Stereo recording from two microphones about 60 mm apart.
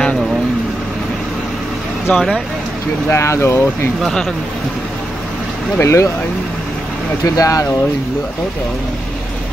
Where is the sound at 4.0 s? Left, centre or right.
Centre.